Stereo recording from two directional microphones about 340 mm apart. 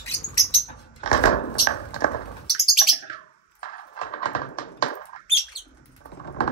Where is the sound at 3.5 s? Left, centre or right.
Left.